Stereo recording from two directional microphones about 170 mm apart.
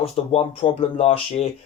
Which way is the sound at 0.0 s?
35° left (ahead or behind).